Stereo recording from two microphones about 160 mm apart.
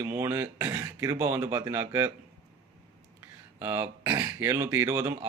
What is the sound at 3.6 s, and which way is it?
Speech, 15° right (ahead or behind).